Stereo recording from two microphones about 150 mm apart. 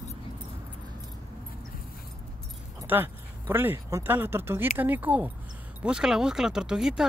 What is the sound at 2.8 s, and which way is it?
Speech, 15° right (ahead or behind).